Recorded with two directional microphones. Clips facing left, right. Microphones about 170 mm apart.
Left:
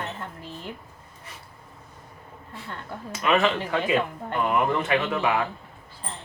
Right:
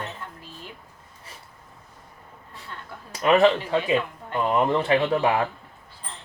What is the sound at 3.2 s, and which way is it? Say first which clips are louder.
Speech: right 4 dB; 35° right (ahead or behind).